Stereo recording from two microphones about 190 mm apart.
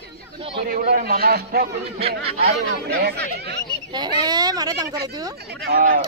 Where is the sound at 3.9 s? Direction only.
20° right (ahead or behind).